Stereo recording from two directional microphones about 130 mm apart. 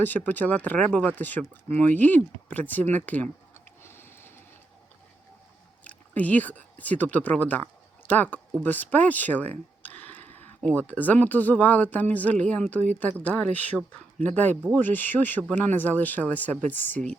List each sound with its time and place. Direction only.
0.0 s speech: 15° left (ahead or behind)
2.9 s tick-tock: 10° left (ahead or behind)
5.8 s speech: 10° left (ahead or behind)
9.8 s a sound: 10° left (ahead or behind)
10.8 s speech: 10° left (ahead or behind)